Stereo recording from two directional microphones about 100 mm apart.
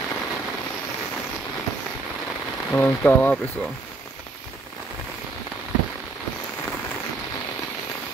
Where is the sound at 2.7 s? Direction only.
20° left (ahead or behind).